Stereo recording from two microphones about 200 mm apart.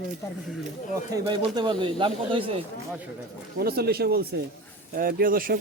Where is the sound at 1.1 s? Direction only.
25° right (ahead or behind).